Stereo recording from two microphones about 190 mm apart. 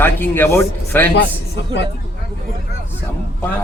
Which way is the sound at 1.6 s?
70° left (ahead or behind).